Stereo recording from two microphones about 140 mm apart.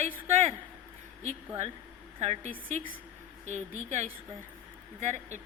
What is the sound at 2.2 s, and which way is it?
A woman's voice, 50° right (ahead or behind).